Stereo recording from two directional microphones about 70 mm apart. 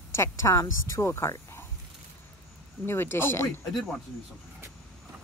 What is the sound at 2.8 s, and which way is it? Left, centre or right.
Speech, left.